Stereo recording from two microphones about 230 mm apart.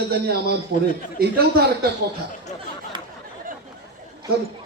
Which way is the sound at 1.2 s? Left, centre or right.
Right.